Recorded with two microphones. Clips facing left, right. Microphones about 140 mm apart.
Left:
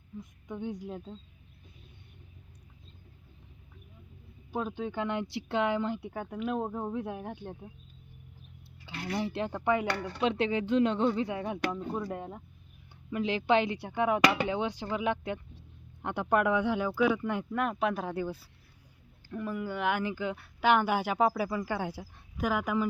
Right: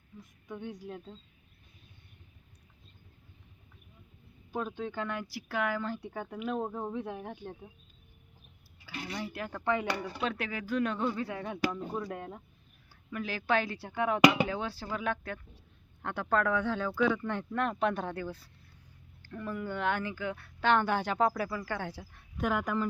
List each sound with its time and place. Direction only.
0.4 s speech: 15° left (ahead or behind)
4.5 s speech: 15° left (ahead or behind)
9.1 s speech: 25° left (ahead or behind)
9.8 s speech: 10° right (ahead or behind)
10.2 s speech: 25° left (ahead or behind); by 12.4 s 10° left (ahead or behind)
13.1 s speech: 20° left (ahead or behind)
20.1 s speech: 20° left (ahead or behind)
22.4 s speech: centre (ahead or behind)